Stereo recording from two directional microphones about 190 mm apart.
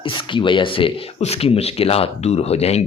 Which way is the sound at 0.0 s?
25° left (ahead or behind).